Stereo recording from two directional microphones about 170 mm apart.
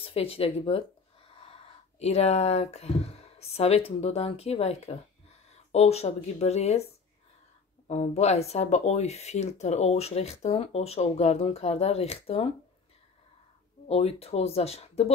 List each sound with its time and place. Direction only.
0.0 s speech: 35° left (ahead or behind)
7.9 s speech: 40° left (ahead or behind)
13.8 s speech: 35° left (ahead or behind)